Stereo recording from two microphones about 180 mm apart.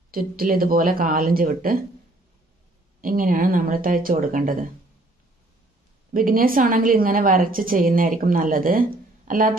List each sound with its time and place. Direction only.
0.1 s a woman's voice: 55° right (ahead or behind)
3.0 s a woman's voice: 50° right (ahead or behind)
6.1 s a woman's voice: 50° right (ahead or behind)